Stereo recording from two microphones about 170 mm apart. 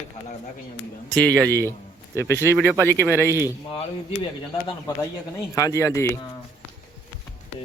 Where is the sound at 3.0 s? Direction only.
15° left (ahead or behind).